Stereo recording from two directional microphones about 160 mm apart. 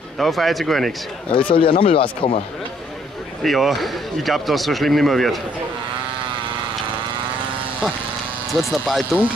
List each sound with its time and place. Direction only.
0.2 s speech: centre (ahead or behind)
1.5 s speech: 35° left (ahead or behind)
3.4 s speech: centre (ahead or behind)
8.5 s speech: centre (ahead or behind)